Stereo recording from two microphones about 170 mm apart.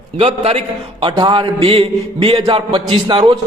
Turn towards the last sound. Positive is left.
turn(degrees=-30)  # may be behind; listen again after turning